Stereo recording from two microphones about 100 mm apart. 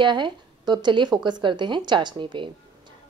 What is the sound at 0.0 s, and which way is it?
Speech, 50° right (ahead or behind).